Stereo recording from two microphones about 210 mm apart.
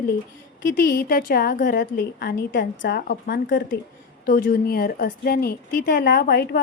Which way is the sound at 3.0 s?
45° left (ahead or behind).